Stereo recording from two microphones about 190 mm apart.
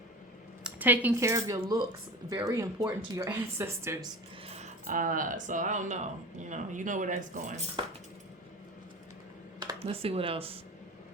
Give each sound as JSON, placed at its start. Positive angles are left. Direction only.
{"t": 0.6, "sound": "speech", "side_deg": -10}
{"t": 4.4, "sound": "keys jangling", "side_deg": -35}
{"t": 4.9, "sound": "speech", "side_deg": -45}
{"t": 9.8, "sound": "speech", "side_deg": -30}